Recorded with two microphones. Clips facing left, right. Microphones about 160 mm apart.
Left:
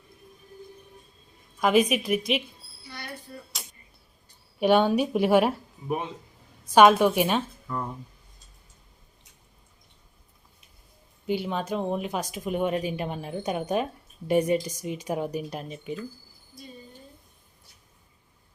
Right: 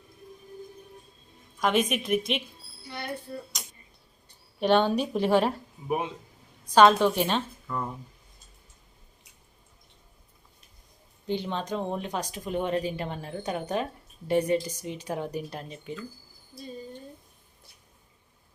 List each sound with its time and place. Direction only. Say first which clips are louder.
1.6 s a woman's voice: left 4 dB; 5° left (ahead or behind)
4.6 s a woman's voice: left 2 dB; 10° left (ahead or behind)
6.7 s a woman's voice: left 2 dB; 10° left (ahead or behind)
7.7 s a woman's voice: even; centre (ahead or behind)
11.3 s a woman's voice: left 2 dB; 10° left (ahead or behind)